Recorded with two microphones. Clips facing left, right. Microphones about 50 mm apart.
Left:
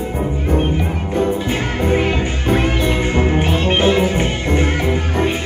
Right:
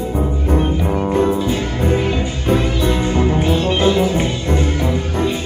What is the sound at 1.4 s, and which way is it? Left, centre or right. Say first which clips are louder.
Music: even; left.